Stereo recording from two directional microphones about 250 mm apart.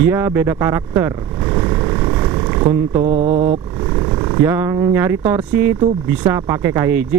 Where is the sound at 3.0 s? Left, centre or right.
Right.